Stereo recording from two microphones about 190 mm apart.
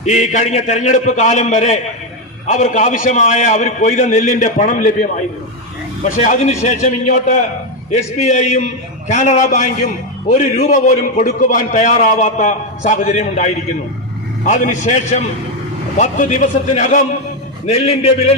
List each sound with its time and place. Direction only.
0.0 s a man's voice: 35° left (ahead or behind)